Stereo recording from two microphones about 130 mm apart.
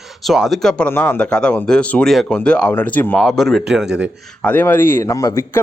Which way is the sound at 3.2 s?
Centre (ahead or behind).